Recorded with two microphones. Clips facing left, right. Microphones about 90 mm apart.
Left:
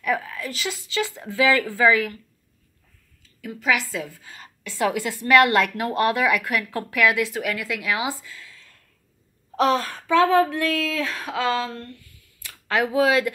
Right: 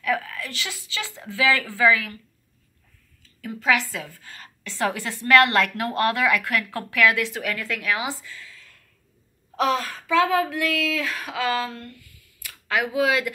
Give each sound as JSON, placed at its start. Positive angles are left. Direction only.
{"t": 0.0, "sound": "speech", "side_deg": 15}
{"t": 3.3, "sound": "a woman's voice", "side_deg": 5}